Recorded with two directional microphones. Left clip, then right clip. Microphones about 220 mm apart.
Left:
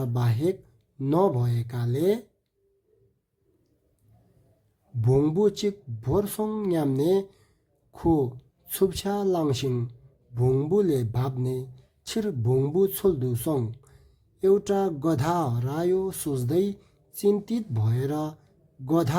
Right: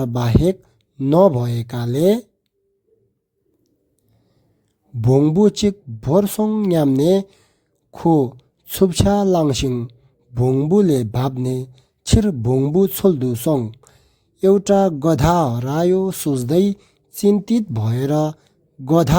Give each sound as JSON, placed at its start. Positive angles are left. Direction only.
{"t": 0.0, "sound": "a man's voice", "side_deg": -35}
{"t": 4.9, "sound": "a man's voice", "side_deg": -35}